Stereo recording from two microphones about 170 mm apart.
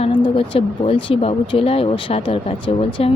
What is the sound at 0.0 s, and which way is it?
Speech, 30° left (ahead or behind).